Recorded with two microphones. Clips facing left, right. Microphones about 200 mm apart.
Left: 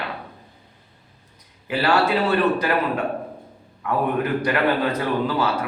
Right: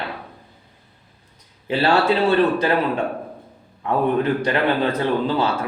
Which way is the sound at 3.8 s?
25° right (ahead or behind).